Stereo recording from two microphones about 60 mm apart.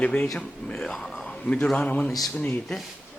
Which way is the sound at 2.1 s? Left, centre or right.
Centre.